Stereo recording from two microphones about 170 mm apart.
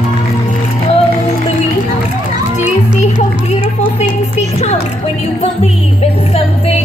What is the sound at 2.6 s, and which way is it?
Music, 45° left (ahead or behind).